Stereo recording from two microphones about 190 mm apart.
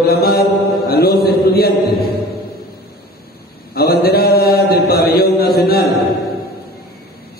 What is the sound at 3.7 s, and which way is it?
Mantra, 55° left (ahead or behind).